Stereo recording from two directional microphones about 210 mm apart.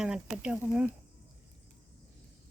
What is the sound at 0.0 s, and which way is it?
Speech, 5° right (ahead or behind).